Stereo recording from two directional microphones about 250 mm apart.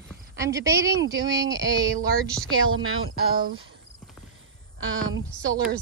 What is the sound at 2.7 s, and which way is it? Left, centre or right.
Speech, right.